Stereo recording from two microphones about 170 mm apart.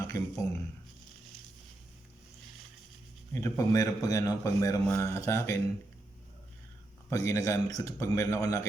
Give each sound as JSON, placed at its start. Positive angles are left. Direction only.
{"t": 0.0, "sound": "speech", "side_deg": 20}
{"t": 3.3, "sound": "a man's voice", "side_deg": 20}
{"t": 7.1, "sound": "a man's voice", "side_deg": 20}